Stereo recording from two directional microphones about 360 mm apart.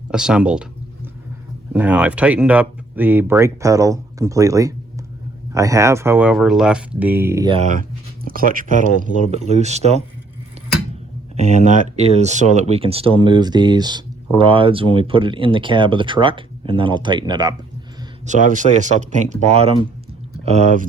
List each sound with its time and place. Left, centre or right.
0.1 s speech: centre
1.7 s speech: centre
11.3 s speech: centre
20.4 s speech: centre